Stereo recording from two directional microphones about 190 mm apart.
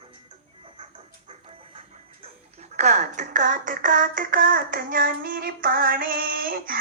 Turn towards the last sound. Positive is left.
turn(degrees=-50)  # may be behind; listen again after turning